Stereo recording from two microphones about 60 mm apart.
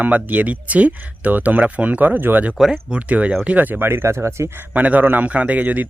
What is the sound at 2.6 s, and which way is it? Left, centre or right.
A man's voice, centre.